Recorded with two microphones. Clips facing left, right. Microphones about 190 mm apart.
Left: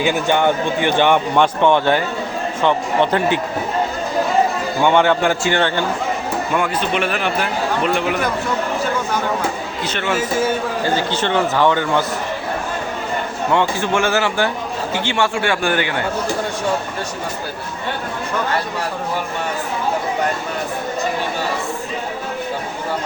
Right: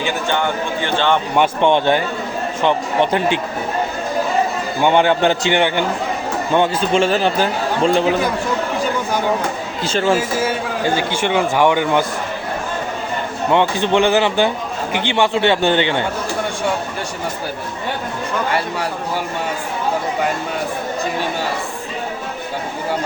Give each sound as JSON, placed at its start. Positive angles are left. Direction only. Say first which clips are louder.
{"t": 0.0, "sound": "speech", "louder": "left 4 dB", "side_deg": 15}
{"t": 1.4, "sound": "speech", "louder": "right 2 dB", "side_deg": -20}
{"t": 4.8, "sound": "speech", "louder": "right 1 dB", "side_deg": -15}
{"t": 6.5, "sound": "speech", "louder": "right 5 dB", "side_deg": -30}
{"t": 9.8, "sound": "speech", "louder": "right 6 dB", "side_deg": -30}
{"t": 10.8, "sound": "speech", "louder": "right 2 dB", "side_deg": -15}
{"t": 13.5, "sound": "speech", "louder": "right 3 dB", "side_deg": -20}